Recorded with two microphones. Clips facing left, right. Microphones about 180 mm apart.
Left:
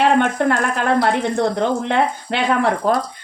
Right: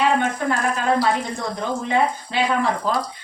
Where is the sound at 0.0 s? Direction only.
65° left (ahead or behind).